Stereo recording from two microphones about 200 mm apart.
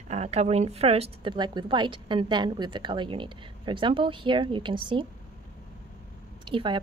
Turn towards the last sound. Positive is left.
turn(degrees=-25)  # may be behind; listen again after turning